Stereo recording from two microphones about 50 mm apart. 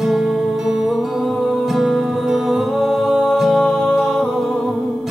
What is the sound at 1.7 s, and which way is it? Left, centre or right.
Music, centre.